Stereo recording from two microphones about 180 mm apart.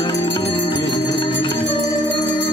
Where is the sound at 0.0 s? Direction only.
25° left (ahead or behind).